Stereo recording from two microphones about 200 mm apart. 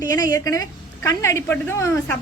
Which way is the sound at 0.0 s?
20° left (ahead or behind).